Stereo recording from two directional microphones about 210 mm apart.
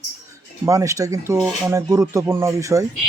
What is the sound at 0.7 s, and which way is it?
Speech, 15° right (ahead or behind).